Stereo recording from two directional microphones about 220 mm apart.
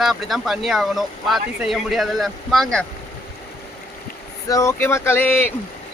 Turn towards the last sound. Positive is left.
turn(degrees=10)  # may be behind; listen again after turning